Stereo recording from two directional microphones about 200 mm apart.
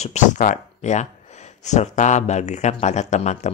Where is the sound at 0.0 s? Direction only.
35° left (ahead or behind).